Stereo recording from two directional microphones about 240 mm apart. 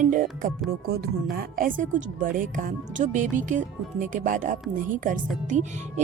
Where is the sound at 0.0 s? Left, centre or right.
Right.